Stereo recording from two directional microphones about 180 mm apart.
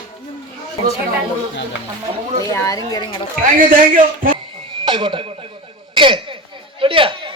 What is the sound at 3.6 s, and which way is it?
Speech, 50° right (ahead or behind).